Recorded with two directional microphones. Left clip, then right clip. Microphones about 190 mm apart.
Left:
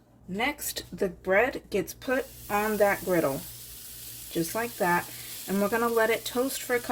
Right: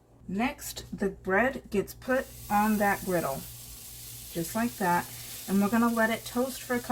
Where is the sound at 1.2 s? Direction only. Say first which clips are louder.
Left 2 dB; 55° left (ahead or behind).